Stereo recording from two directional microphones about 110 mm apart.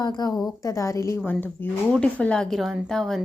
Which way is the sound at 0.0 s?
35° left (ahead or behind).